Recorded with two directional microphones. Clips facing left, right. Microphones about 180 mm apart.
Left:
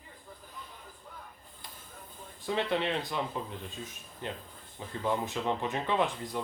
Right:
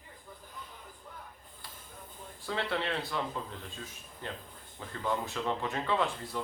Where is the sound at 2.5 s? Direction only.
20° left (ahead or behind).